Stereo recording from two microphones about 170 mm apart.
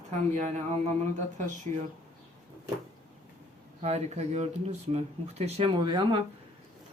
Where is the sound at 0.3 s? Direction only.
45° right (ahead or behind).